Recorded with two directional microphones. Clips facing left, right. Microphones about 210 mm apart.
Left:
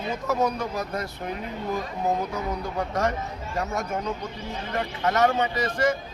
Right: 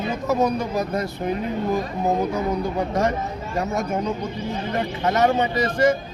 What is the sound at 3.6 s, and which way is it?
A man's voice, 20° right (ahead or behind).